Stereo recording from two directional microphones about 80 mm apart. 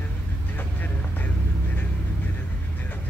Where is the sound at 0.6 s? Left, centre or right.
Left.